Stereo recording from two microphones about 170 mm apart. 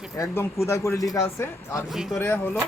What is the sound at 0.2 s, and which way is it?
Speech, 15° left (ahead or behind).